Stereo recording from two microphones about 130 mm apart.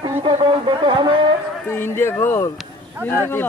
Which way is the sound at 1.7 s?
20° left (ahead or behind).